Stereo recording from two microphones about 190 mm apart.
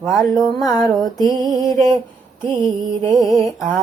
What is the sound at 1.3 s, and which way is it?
Music, 20° right (ahead or behind).